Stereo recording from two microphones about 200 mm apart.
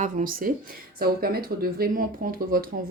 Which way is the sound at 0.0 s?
40° right (ahead or behind).